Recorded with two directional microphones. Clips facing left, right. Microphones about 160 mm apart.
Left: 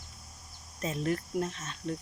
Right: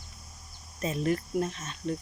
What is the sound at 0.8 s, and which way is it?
Speech, 5° right (ahead or behind).